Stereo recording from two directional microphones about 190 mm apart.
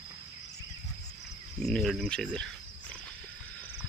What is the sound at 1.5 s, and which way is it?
Speech, 5° left (ahead or behind).